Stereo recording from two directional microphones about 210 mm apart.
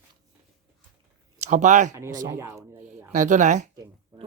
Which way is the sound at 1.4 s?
35° right (ahead or behind).